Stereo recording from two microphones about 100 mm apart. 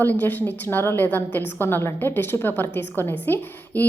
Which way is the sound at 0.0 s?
20° left (ahead or behind).